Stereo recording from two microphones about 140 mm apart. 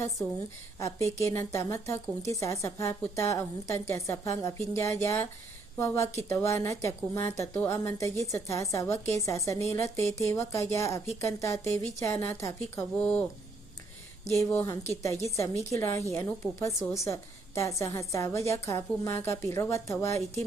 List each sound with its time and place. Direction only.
0.8 s a woman's voice: 20° left (ahead or behind)
13.0 s speech: 10° left (ahead or behind)
14.3 s a woman's voice: 20° left (ahead or behind)